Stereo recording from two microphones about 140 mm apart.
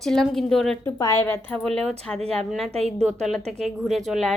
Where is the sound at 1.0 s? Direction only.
20° left (ahead or behind).